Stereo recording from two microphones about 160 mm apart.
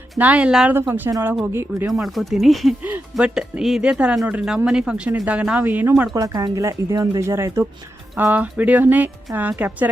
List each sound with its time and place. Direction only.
0.2 s speech: 10° right (ahead or behind)
1.9 s speech: centre (ahead or behind)
6.1 s speech: 20° right (ahead or behind)